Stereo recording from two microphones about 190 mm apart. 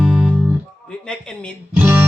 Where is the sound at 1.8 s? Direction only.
10° right (ahead or behind).